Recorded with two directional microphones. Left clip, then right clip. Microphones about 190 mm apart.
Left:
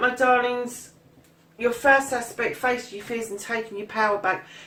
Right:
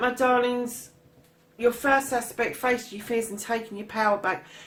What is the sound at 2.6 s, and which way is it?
Speech, 45° right (ahead or behind).